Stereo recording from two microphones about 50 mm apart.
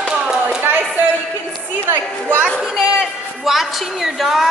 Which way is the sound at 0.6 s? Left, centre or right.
Right.